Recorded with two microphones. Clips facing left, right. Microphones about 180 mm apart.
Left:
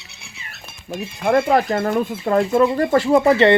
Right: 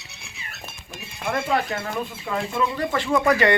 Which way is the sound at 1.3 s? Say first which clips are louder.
Left 8 dB; 50° left (ahead or behind).